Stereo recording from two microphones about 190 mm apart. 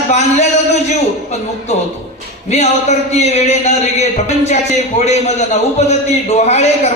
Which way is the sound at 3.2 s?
35° left (ahead or behind).